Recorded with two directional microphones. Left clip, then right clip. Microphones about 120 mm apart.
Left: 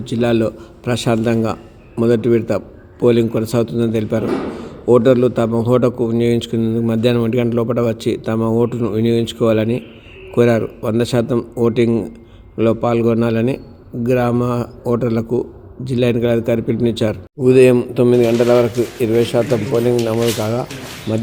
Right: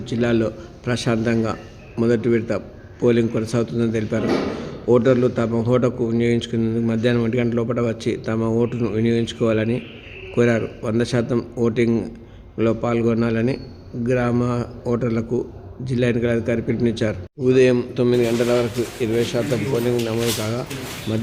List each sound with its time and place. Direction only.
0.0 s speech: 35° left (ahead or behind)
17.7 s speech: 25° left (ahead or behind)
18.9 s speech: 35° left (ahead or behind)
20.0 s speech: 20° left (ahead or behind)